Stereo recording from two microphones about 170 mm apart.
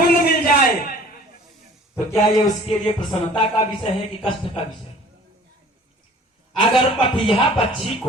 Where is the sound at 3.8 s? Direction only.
30° left (ahead or behind).